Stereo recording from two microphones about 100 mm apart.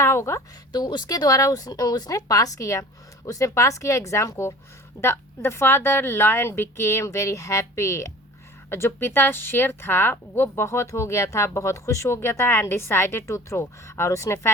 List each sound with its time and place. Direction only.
0.0 s a woman's voice: 25° left (ahead or behind)
0.7 s a woman's voice: 45° left (ahead or behind); by 14.5 s 25° left (ahead or behind)